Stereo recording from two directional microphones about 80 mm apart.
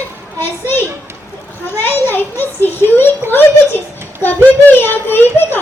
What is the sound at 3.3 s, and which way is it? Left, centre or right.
A child's voice, left.